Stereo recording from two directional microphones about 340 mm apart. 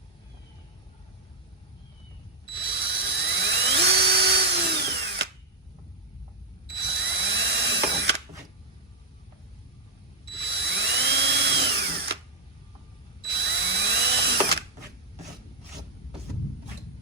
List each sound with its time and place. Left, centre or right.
2.5 s drill: right
6.7 s drill: right
10.3 s drill: right
13.2 s drill: right